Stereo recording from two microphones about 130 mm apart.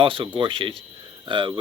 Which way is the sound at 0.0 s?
40° right (ahead or behind).